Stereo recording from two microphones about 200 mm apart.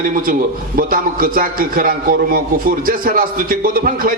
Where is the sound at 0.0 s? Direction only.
45° right (ahead or behind).